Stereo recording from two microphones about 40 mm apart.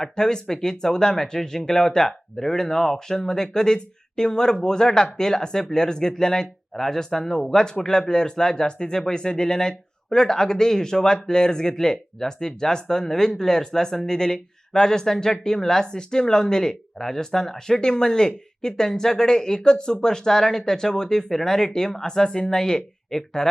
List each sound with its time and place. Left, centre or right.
0.0 s speech: centre